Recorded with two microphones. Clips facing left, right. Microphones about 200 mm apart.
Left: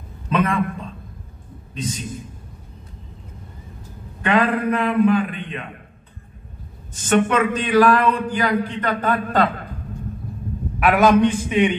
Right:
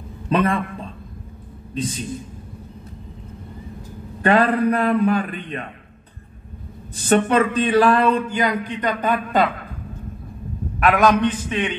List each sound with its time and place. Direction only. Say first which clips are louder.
0.3 s a man's voice: right 2 dB; 30° right (ahead or behind)
1.7 s a man's voice: right 3 dB; 35° right (ahead or behind)
4.2 s a man's voice: right 2 dB; 35° right (ahead or behind)
7.2 s a man's voice: right 2 dB; 30° right (ahead or behind); by 9.5 s 15° right (ahead or behind)
10.8 s a man's voice: left 2 dB; 5° left (ahead or behind)